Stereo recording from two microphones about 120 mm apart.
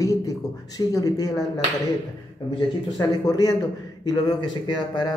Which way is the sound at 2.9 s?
30° left (ahead or behind).